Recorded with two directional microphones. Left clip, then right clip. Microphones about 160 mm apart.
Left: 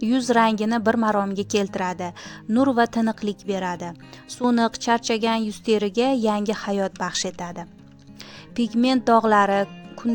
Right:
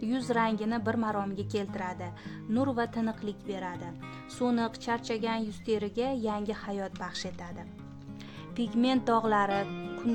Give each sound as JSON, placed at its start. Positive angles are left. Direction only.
{"t": 0.0, "sound": "a woman's voice", "side_deg": 45}
{"t": 8.5, "sound": "speech", "side_deg": 40}